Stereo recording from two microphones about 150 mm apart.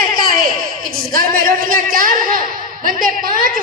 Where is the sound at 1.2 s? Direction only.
65° right (ahead or behind).